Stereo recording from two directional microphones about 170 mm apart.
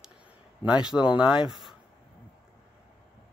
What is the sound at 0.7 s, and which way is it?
Speech, 5° right (ahead or behind).